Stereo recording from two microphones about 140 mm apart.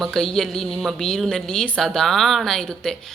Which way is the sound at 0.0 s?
5° left (ahead or behind).